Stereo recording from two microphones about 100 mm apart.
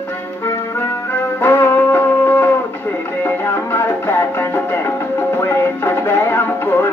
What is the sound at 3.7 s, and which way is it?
Music, 25° left (ahead or behind).